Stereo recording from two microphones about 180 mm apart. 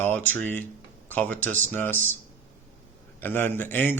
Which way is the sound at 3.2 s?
10° left (ahead or behind).